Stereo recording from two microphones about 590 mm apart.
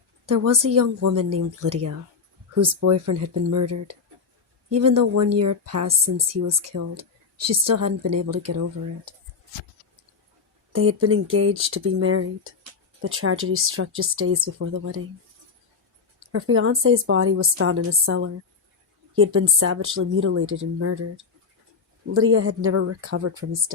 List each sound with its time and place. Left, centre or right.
0.3 s speech: right
10.7 s speech: right
16.2 s speech: right
22.3 s speech: right